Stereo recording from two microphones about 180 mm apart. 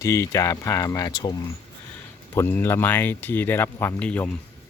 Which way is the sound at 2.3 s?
10° left (ahead or behind).